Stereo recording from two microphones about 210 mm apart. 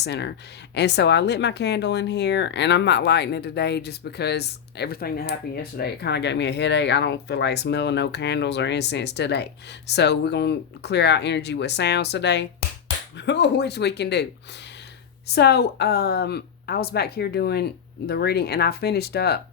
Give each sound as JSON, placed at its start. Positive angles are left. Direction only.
{"t": 0.0, "sound": "speech", "side_deg": 55}
{"t": 15.4, "sound": "speech", "side_deg": 50}